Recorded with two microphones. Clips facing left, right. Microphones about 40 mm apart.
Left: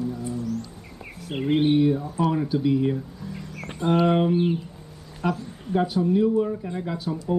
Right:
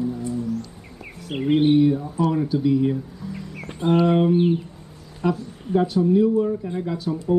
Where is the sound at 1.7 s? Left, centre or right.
Centre.